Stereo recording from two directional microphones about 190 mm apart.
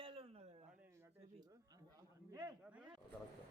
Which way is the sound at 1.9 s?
20° right (ahead or behind).